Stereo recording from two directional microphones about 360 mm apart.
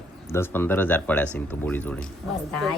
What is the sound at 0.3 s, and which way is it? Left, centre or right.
Speech, centre.